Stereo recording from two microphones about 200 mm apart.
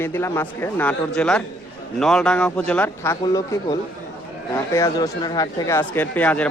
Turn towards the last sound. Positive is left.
turn(degrees=5)  # may be behind; listen again after turning